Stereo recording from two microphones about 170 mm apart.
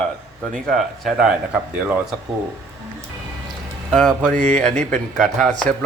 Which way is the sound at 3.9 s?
5° left (ahead or behind).